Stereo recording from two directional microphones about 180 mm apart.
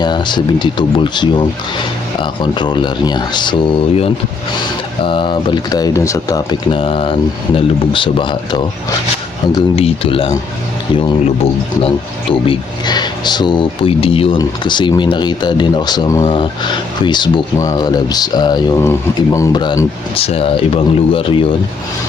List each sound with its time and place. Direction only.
0.0 s speech: 25° left (ahead or behind)
6.7 s speech: 30° left (ahead or behind)
11.8 s speech: 30° left (ahead or behind)